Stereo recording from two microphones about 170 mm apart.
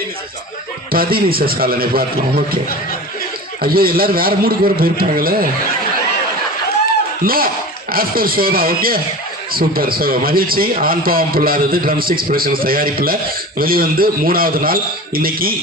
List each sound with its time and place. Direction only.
0.9 s a man's voice: 60° right (ahead or behind)
3.6 s a man's voice: 60° right (ahead or behind)
7.3 s a man's voice: 60° right (ahead or behind)